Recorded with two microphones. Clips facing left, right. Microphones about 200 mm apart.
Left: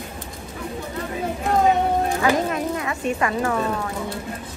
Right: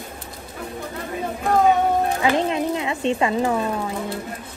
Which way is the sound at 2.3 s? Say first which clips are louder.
Right 2 dB; 25° right (ahead or behind).